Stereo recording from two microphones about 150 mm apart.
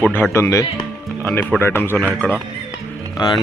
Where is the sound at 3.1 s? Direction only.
30° left (ahead or behind).